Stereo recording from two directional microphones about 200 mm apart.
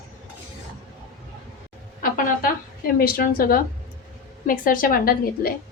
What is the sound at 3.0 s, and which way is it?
A woman's voice, 45° left (ahead or behind).